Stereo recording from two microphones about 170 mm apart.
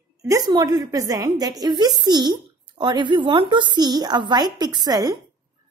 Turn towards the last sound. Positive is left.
turn(degrees=-25)  # may be behind; listen again after turning